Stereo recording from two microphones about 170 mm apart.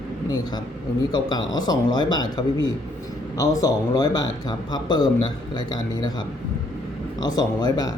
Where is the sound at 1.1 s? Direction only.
25° left (ahead or behind).